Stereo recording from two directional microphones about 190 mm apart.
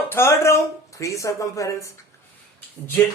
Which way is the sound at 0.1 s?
15° left (ahead or behind).